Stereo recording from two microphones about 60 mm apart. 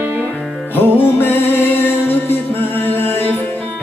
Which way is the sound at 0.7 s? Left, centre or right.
Left.